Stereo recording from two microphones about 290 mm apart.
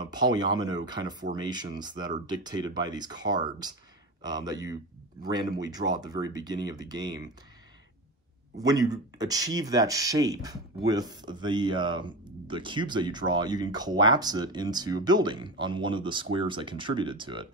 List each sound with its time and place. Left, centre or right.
0.0 s speech: centre
8.5 s speech: centre